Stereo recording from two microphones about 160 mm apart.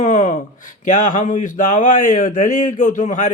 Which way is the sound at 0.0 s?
50° left (ahead or behind).